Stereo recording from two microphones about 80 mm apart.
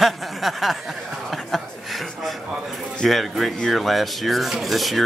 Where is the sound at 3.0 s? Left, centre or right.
Centre.